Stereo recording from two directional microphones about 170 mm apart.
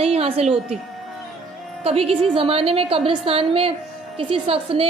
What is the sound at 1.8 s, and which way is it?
A woman's voice, 35° right (ahead or behind).